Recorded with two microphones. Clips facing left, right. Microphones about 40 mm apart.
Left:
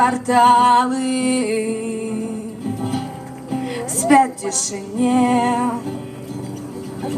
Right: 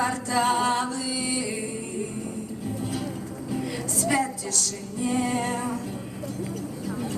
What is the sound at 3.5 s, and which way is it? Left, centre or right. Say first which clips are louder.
Music: left 6 dB; left.